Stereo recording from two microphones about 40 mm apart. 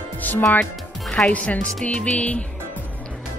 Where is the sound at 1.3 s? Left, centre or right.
Left.